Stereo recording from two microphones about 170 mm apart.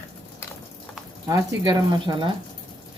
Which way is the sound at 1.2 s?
25° right (ahead or behind).